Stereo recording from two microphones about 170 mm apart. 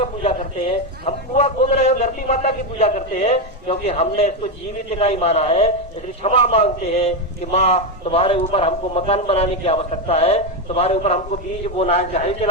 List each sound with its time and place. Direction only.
0.0 s a man's voice: 35° left (ahead or behind)